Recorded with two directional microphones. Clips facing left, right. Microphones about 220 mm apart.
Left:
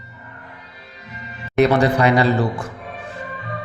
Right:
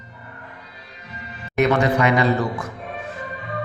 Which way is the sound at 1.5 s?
35° left (ahead or behind).